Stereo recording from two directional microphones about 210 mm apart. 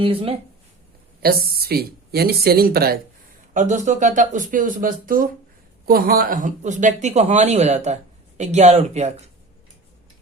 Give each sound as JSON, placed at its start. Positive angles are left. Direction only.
{"t": 0.0, "sound": "speech", "side_deg": -25}
{"t": 1.2, "sound": "speech", "side_deg": -45}